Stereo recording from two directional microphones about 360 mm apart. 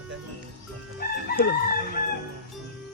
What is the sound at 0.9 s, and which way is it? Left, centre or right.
Crowing, left.